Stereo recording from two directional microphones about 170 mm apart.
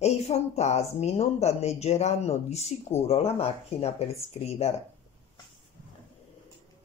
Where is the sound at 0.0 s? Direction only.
40° left (ahead or behind).